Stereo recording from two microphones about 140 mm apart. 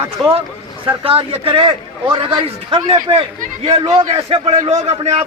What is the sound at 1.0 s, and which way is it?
A man's voice, 40° right (ahead or behind).